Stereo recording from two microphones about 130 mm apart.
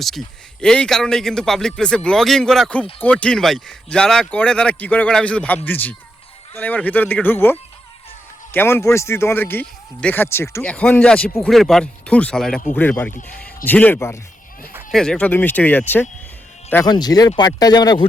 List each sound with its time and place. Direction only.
0.6 s a man's voice: 5° left (ahead or behind)
10.6 s a man's voice: 10° left (ahead or behind)
14.9 s a man's voice: 5° left (ahead or behind)
16.8 s speech: 30° left (ahead or behind)